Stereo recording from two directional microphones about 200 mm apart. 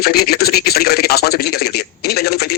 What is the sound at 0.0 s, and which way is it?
Speech, 50° left (ahead or behind).